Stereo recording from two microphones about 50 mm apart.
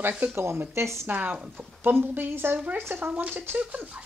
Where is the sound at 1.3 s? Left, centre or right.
Right.